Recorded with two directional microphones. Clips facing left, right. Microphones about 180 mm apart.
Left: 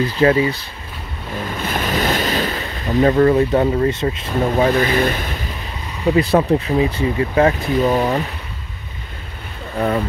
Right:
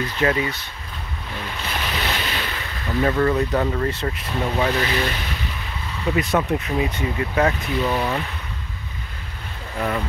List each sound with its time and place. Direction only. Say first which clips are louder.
0.0 s speech: left 7 dB; 30° left (ahead or behind)
1.6 s ocean: left 8 dB; 45° left (ahead or behind); by 4.3 s 25° left (ahead or behind)
4.6 s speech: left 6 dB; 45° left (ahead or behind)
6.0 s speech: left 6 dB; 35° left (ahead or behind)